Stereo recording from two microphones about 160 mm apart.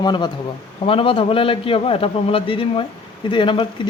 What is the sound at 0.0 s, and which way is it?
Speech, 25° left (ahead or behind).